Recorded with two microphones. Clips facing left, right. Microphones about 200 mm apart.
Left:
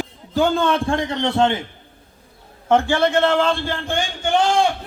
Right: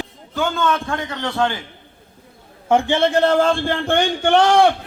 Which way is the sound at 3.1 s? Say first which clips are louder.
Right 2 dB; 40° right (ahead or behind).